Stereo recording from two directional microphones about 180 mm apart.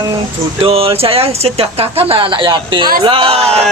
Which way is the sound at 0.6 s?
30° right (ahead or behind).